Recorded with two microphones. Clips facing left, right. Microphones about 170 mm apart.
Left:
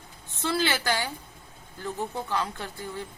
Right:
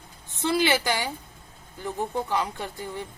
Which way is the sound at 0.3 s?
15° right (ahead or behind).